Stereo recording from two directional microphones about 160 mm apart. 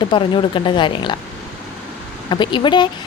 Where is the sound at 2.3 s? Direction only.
30° left (ahead or behind).